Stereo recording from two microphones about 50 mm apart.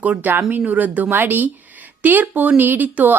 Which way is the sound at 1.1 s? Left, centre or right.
Right.